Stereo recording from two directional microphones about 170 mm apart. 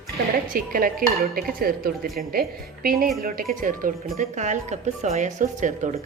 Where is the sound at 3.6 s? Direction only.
55° right (ahead or behind).